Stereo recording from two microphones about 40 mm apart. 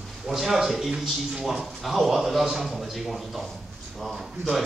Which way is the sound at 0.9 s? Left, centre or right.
Centre.